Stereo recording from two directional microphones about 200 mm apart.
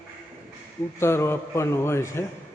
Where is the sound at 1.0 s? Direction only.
15° left (ahead or behind).